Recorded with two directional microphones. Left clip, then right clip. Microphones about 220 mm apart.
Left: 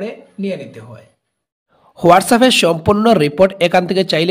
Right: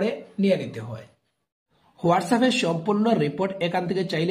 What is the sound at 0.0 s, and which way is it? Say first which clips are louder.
Speech: even; centre (ahead or behind).